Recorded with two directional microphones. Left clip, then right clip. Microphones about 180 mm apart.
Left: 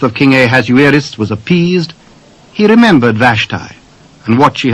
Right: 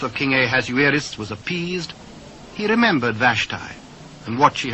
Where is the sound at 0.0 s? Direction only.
35° left (ahead or behind).